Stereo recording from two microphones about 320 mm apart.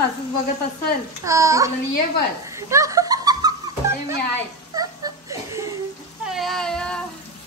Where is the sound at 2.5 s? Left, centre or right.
Centre.